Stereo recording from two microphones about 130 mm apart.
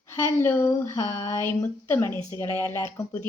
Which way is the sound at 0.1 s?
20° left (ahead or behind).